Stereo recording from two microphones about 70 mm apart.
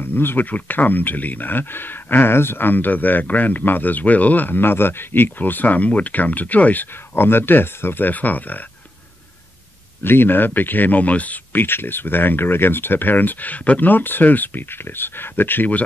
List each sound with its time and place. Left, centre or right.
0.0 s speech: left
10.0 s speech: left